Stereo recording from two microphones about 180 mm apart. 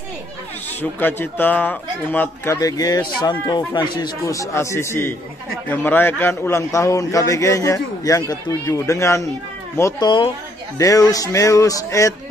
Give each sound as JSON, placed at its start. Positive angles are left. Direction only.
{"t": 0.7, "sound": "a man's voice", "side_deg": 10}
{"t": 9.8, "sound": "music", "side_deg": 20}